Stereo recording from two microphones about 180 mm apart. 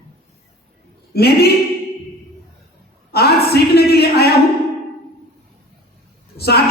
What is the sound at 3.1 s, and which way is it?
A man's voice, 60° left (ahead or behind).